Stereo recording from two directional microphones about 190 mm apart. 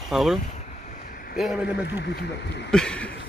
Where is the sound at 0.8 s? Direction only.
45° left (ahead or behind).